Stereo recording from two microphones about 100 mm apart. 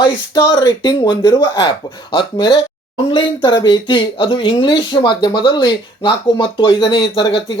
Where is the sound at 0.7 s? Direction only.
50° left (ahead or behind).